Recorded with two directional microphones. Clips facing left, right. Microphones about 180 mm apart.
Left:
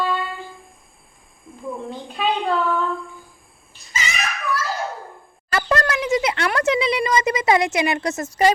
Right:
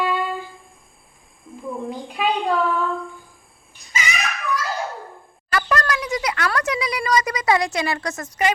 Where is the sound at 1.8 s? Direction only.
10° right (ahead or behind).